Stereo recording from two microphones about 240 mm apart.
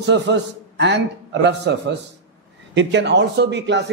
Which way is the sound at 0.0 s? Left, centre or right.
Right.